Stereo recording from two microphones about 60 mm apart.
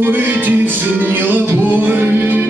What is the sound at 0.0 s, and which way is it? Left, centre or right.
Music, right.